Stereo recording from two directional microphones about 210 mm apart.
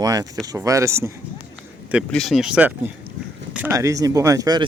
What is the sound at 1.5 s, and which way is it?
Speech, 5° right (ahead or behind).